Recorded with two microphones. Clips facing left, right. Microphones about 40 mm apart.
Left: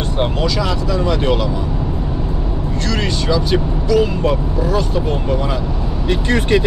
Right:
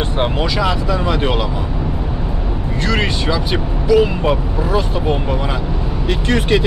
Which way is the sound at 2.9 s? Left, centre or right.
Right.